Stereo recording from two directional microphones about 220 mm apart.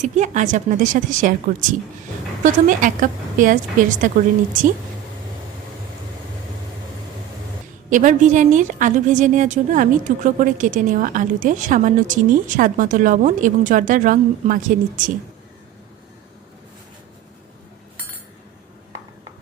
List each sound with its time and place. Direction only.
0.0 s a woman's voice: 35° right (ahead or behind)
2.4 s a woman's voice: 35° right (ahead or behind)
7.9 s a woman's voice: 35° right (ahead or behind)